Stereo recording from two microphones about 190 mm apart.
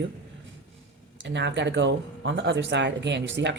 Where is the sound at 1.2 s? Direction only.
70° right (ahead or behind).